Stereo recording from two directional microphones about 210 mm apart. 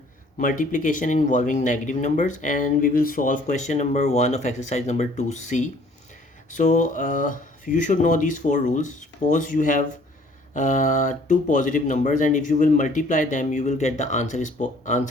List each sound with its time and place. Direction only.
0.3 s speech: 40° left (ahead or behind)